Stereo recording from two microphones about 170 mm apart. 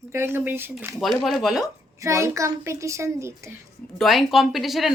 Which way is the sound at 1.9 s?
20° right (ahead or behind).